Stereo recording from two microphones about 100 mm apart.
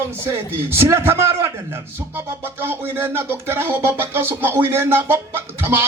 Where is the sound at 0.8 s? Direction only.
25° right (ahead or behind).